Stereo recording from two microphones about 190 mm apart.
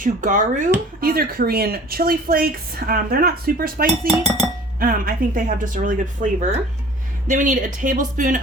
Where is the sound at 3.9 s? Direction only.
Centre (ahead or behind).